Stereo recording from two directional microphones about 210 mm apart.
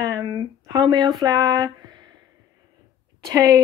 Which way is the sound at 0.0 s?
15° right (ahead or behind).